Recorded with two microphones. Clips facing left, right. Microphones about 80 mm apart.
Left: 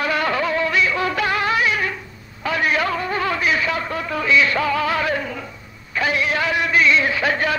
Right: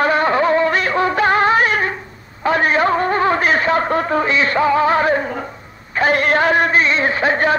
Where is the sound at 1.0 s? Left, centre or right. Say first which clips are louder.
Right 6 dB; right.